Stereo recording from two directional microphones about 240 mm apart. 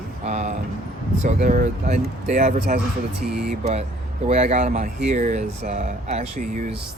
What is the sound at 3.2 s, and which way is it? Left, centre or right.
Speech, centre.